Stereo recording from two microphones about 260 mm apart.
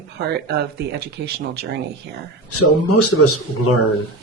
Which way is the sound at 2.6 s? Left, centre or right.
Left.